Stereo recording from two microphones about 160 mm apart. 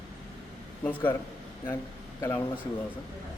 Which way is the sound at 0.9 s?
10° left (ahead or behind).